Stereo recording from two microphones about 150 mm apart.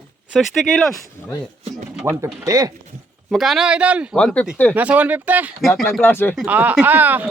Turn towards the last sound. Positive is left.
turn(degrees=-10)  # may be behind; listen again after turning